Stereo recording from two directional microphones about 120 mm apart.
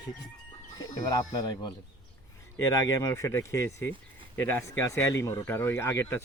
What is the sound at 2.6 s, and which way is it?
Speech, 25° left (ahead or behind).